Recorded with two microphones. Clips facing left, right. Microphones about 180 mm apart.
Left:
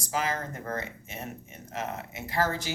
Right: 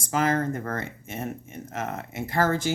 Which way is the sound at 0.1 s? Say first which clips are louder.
Right 7 dB; 55° right (ahead or behind).